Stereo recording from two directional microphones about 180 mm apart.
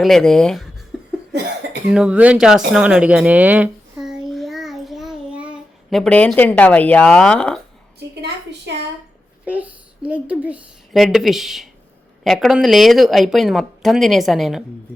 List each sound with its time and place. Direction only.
0.0 s speech: centre (ahead or behind)
1.9 s speech: 5° right (ahead or behind)
7.9 s a woman's voice: 65° right (ahead or behind)
9.4 s speech: 10° right (ahead or behind)